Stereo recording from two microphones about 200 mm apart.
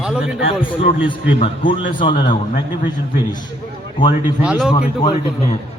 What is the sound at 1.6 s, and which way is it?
Speech, 45° left (ahead or behind).